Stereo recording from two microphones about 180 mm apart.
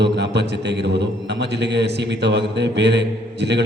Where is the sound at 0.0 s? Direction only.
70° right (ahead or behind).